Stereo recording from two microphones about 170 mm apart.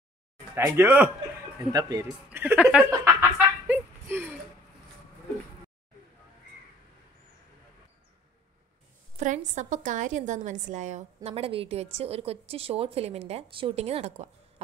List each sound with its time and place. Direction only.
0.6 s a man's voice: 10° right (ahead or behind)
1.7 s speech: 20° right (ahead or behind)
2.2 s a woman's voice: 10° right (ahead or behind)
2.9 s snicker: 15° right (ahead or behind)
9.1 s a sound: 50° right (ahead or behind)
9.6 s a woman's voice: 45° right (ahead or behind)